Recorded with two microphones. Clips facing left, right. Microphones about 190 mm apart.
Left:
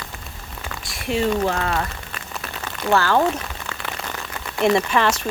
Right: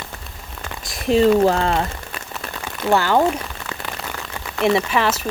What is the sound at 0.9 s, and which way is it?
Speech, 35° right (ahead or behind).